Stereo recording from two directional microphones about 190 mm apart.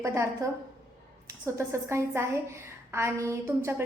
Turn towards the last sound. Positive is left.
turn(degrees=-15)  # may be behind; listen again after turning